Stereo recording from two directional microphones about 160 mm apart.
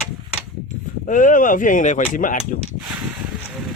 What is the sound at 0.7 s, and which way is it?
Speech, 55° left (ahead or behind).